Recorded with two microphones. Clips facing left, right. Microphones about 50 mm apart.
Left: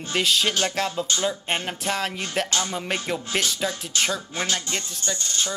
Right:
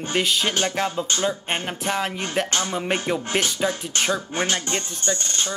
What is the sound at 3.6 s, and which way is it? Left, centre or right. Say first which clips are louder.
Speech: right 3 dB; right.